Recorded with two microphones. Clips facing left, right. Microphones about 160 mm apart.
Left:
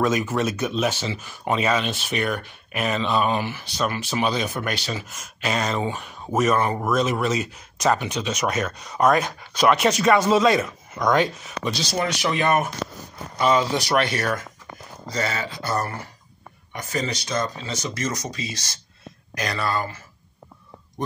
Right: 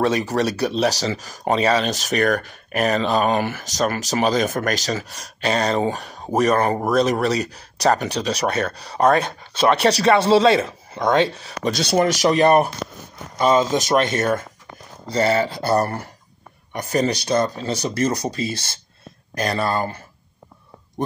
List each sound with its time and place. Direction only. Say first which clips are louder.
0.0 s speech: right 2 dB; 35° right (ahead or behind)
11.8 s speech: right 9 dB; 60° right (ahead or behind)
12.1 s speech: right 6 dB; 40° right (ahead or behind)
13.7 s speech: right 4 dB; 20° right (ahead or behind)
18.4 s speech: right 7 dB; 55° right (ahead or behind)
19.6 s speech: right 2 dB; 25° right (ahead or behind)